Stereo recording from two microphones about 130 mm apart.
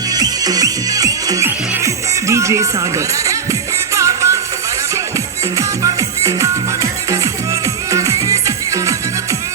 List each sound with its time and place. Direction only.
0.1 s music: 30° right (ahead or behind)
3.9 s music: 25° right (ahead or behind)
5.5 s music: 25° right (ahead or behind)
7.9 s music: 25° right (ahead or behind)